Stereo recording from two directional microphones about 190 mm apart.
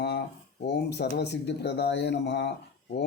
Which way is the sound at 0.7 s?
65° left (ahead or behind).